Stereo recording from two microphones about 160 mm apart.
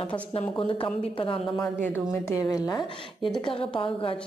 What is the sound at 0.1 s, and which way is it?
A woman's voice, 35° left (ahead or behind).